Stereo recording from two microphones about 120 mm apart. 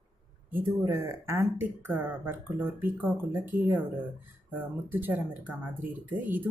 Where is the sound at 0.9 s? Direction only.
25° right (ahead or behind).